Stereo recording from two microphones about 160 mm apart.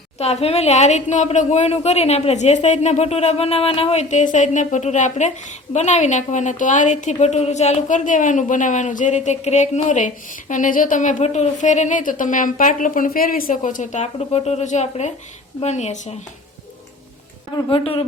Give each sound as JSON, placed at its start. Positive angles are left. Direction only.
{"t": 0.2, "sound": "speech", "side_deg": 40}
{"t": 17.5, "sound": "speech", "side_deg": 35}